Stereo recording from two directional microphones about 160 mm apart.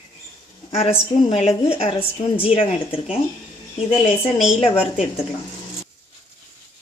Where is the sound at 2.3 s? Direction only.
35° left (ahead or behind).